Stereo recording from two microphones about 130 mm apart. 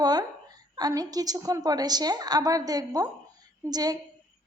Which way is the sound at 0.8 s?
30° right (ahead or behind).